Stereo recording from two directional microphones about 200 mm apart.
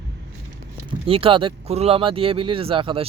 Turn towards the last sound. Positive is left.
turn(degrees=-25)  # may be behind; listen again after turning